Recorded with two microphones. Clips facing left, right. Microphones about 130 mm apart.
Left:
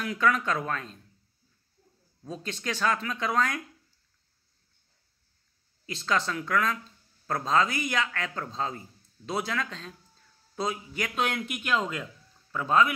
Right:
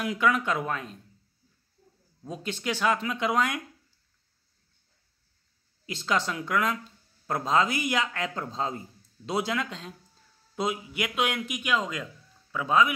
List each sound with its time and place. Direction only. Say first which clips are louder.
0.0 s speech: right 1 dB; 15° right (ahead or behind)
2.2 s speech: right 2 dB; 15° right (ahead or behind)
6.0 s a man's voice: even; 20° right (ahead or behind)